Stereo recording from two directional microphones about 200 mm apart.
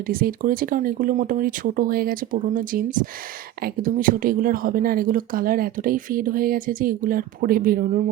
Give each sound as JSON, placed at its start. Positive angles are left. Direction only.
{"t": 0.1, "sound": "speech", "side_deg": -45}